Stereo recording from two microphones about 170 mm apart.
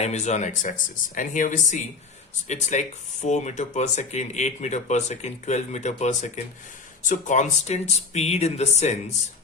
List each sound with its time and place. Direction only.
0.0 s speech: 40° left (ahead or behind)